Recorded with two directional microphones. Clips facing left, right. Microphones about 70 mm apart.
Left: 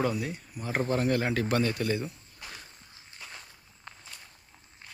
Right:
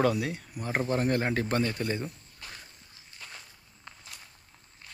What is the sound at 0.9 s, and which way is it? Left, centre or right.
Speech, right.